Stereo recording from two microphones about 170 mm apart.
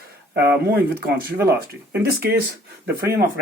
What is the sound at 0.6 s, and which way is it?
Speech, 65° right (ahead or behind).